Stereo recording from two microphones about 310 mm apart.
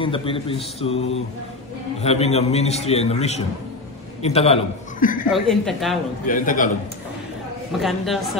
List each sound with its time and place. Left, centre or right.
0.0 s a man's voice: centre
5.3 s a woman's voice: centre
6.2 s a man's voice: left
7.8 s a woman's voice: centre